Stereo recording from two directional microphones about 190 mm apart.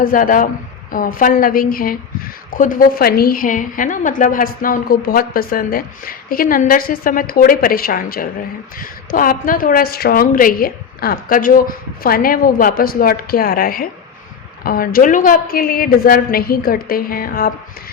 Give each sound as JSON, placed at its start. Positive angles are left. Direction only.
{"t": 0.0, "sound": "a woman's voice", "side_deg": 45}